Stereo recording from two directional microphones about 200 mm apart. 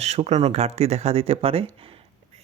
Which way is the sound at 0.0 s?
30° right (ahead or behind).